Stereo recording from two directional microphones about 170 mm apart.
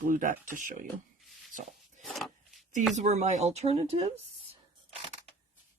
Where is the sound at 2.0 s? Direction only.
Centre (ahead or behind).